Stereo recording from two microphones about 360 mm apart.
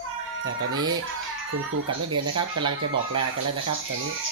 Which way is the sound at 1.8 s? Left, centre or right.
Right.